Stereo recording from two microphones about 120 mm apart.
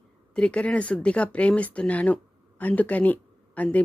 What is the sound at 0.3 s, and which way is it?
Speech, 10° left (ahead or behind).